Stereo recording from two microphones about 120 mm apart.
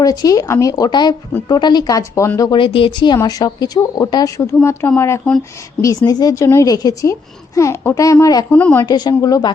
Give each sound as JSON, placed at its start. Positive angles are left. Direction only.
{"t": 0.0, "sound": "a woman's voice", "side_deg": 30}
{"t": 2.5, "sound": "a woman's voice", "side_deg": 45}
{"t": 8.4, "sound": "a woman's voice", "side_deg": 15}
{"t": 8.9, "sound": "speech", "side_deg": 35}